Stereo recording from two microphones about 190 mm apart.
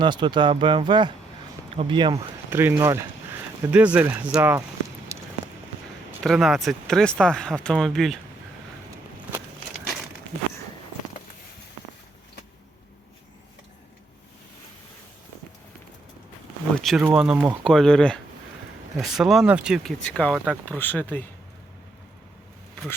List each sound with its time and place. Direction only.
0.0 s speech: 25° right (ahead or behind)
2.5 s speech: 10° right (ahead or behind)
5.1 s a sound: 15° right (ahead or behind)
6.2 s speech: centre (ahead or behind)
16.7 s a sound: centre (ahead or behind)
17.1 s speech: 5° right (ahead or behind)